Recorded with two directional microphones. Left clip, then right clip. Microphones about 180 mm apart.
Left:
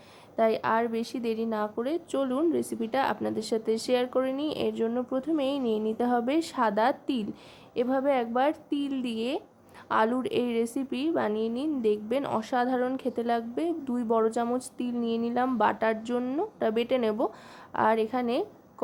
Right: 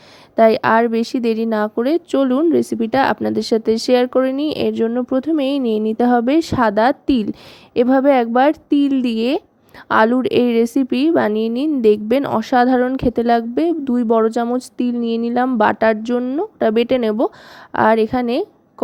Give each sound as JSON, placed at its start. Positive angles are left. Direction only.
{"t": 0.3, "sound": "a woman's voice", "side_deg": -45}